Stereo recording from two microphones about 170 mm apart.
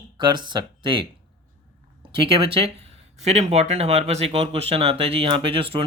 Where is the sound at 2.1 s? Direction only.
30° right (ahead or behind).